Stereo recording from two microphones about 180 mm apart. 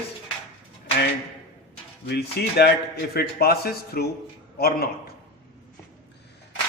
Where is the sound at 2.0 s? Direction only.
65° left (ahead or behind).